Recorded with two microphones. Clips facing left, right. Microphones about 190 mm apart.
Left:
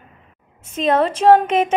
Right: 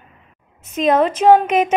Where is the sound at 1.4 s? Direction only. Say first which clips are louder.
Right 1 dB; 30° left (ahead or behind).